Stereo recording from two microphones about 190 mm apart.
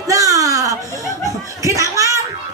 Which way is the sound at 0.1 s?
15° right (ahead or behind).